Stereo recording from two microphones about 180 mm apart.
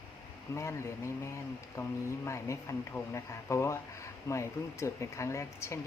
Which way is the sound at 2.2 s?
15° left (ahead or behind).